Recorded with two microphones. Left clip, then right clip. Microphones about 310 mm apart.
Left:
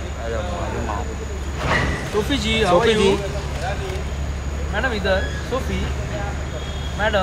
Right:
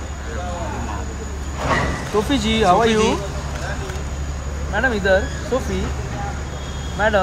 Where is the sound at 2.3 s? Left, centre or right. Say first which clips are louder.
Right 2 dB; right.